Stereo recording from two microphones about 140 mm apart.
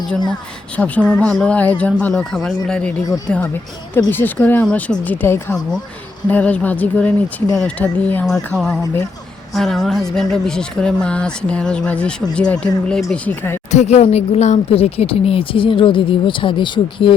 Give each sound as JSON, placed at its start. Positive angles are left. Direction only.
{"t": 0.8, "sound": "speech", "side_deg": 10}
{"t": 13.7, "sound": "speech", "side_deg": 55}